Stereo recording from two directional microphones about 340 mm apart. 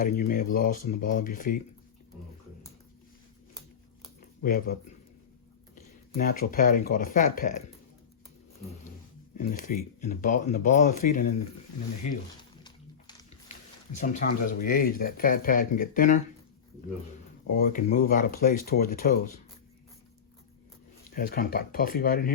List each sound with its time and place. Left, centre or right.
0.0 s speech: left
4.4 s speech: left
9.6 s speech: left
12.4 s a sound: centre
13.9 s speech: left
17.5 s speech: left
21.2 s speech: left